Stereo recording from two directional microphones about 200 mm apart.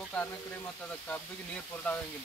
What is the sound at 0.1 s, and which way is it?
Speech, 5° left (ahead or behind).